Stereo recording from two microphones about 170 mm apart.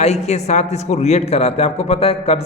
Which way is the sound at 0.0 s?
40° left (ahead or behind).